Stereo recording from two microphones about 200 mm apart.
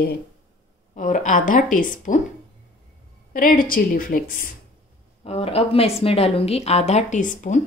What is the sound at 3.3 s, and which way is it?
A woman's voice, 45° left (ahead or behind).